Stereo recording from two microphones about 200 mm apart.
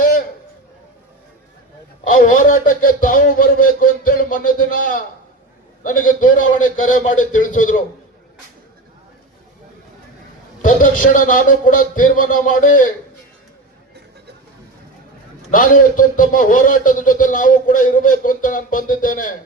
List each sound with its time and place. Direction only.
2.1 s a man's voice: 40° left (ahead or behind)
10.6 s a man's voice: 45° left (ahead or behind)
15.4 s a man's voice: 40° left (ahead or behind)